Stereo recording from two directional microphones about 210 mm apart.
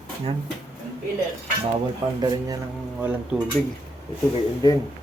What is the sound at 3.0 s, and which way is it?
Speech, 5° right (ahead or behind).